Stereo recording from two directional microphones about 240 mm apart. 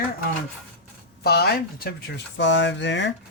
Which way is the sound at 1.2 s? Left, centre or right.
Left.